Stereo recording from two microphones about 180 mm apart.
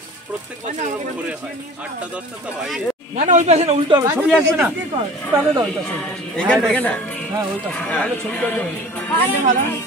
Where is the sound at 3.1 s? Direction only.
40° right (ahead or behind).